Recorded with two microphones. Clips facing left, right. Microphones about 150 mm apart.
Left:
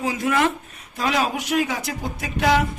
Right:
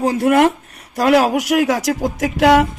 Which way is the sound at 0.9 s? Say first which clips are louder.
Right 9 dB; 75° right (ahead or behind).